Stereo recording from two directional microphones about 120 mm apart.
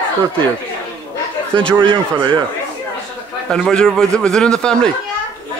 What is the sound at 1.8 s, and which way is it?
Speech, 45° right (ahead or behind).